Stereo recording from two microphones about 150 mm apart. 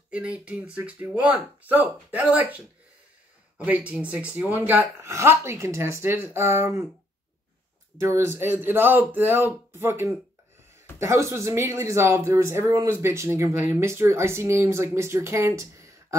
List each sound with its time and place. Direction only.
0.1 s speech: 10° right (ahead or behind)
8.0 s speech: 20° right (ahead or behind)